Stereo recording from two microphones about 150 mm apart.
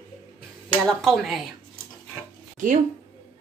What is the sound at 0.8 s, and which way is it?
Speech, centre (ahead or behind).